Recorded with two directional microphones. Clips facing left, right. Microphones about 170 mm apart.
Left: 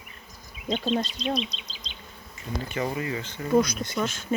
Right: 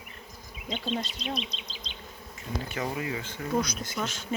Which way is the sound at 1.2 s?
55° right (ahead or behind).